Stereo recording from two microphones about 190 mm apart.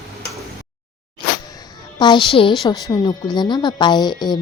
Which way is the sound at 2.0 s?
25° left (ahead or behind).